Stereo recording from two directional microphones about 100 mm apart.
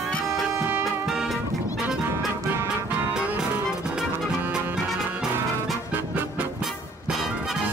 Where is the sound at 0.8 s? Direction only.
Centre (ahead or behind).